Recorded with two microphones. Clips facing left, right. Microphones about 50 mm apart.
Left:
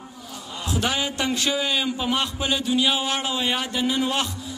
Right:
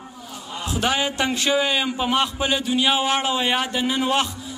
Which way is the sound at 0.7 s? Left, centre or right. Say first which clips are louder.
Right 2 dB; centre.